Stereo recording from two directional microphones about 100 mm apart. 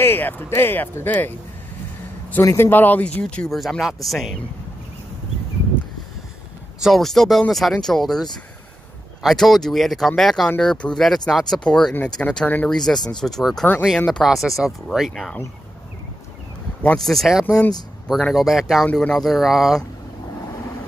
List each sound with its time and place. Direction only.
0.0 s speech: 20° left (ahead or behind)
2.4 s speech: 25° left (ahead or behind)
3.5 s speech: centre (ahead or behind)
6.8 s speech: centre (ahead or behind)
14.2 s speech: centre (ahead or behind)
16.8 s speech: 5° left (ahead or behind)